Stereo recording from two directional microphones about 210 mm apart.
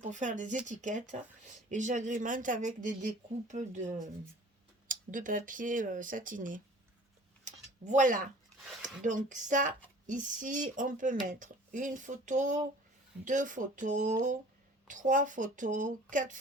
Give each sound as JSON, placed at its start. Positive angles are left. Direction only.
{"t": 0.0, "sound": "speech", "side_deg": -35}
{"t": 7.4, "sound": "a sound", "side_deg": -35}
{"t": 8.8, "sound": "speech", "side_deg": -35}